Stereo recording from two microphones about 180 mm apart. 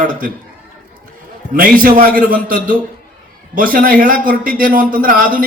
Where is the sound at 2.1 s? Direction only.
50° right (ahead or behind).